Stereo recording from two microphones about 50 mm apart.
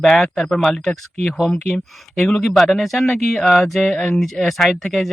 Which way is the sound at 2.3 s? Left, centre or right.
Centre.